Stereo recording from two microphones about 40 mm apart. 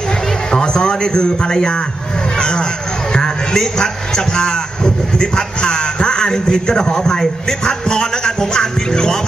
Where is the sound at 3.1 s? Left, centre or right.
Centre.